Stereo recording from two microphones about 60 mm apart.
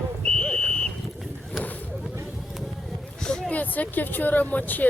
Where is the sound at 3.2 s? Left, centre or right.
Centre.